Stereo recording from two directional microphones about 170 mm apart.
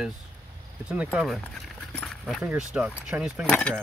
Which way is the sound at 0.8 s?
5° right (ahead or behind).